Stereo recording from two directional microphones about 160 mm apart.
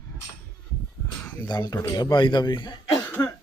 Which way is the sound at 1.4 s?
25° left (ahead or behind).